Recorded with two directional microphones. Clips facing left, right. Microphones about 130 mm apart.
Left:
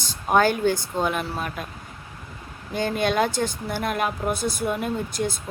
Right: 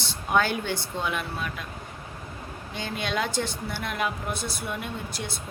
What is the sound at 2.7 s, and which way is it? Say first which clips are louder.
Speech: left 8 dB; 45° left (ahead or behind).